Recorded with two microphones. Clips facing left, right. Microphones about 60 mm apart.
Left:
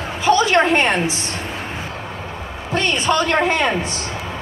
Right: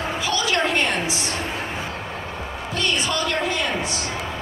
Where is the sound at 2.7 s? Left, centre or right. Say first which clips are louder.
Left 6 dB; left.